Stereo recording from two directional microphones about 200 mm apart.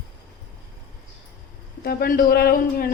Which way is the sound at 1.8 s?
50° left (ahead or behind).